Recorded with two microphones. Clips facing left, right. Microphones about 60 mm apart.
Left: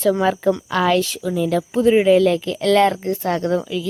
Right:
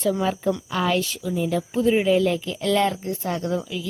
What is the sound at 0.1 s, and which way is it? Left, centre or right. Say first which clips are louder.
A woman's voice: left 6 dB; left.